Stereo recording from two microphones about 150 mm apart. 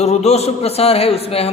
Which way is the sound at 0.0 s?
45° left (ahead or behind).